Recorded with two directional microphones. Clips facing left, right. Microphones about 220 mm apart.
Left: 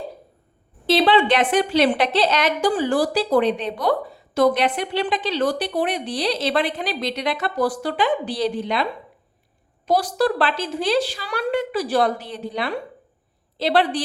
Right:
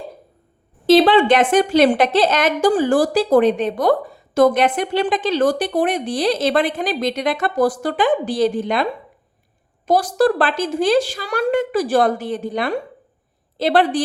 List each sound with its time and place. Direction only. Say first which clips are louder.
0.9 s a woman's voice: right 5 dB; 45° right (ahead or behind)